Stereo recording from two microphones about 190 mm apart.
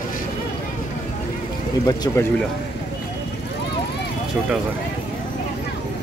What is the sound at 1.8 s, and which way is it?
Speech, 20° left (ahead or behind).